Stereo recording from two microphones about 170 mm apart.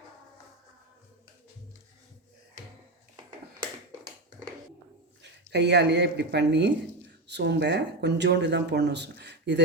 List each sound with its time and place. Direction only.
5.2 s speech: 90° right